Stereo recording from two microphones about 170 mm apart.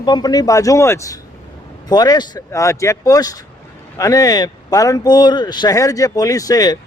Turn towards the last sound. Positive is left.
turn(degrees=20)  # may be behind; listen again after turning